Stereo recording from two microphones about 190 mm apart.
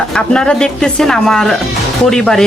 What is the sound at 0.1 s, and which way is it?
Speech, 5° left (ahead or behind).